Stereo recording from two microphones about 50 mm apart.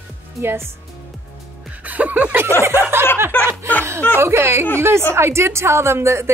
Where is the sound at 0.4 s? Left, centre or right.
Right.